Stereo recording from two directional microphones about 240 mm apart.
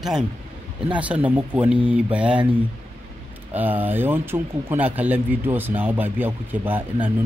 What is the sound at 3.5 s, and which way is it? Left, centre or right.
Speech, centre.